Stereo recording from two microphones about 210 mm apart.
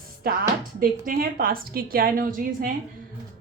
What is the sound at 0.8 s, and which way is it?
A woman's voice, 45° right (ahead or behind).